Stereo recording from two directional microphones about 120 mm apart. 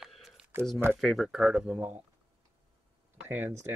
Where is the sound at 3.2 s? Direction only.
15° right (ahead or behind).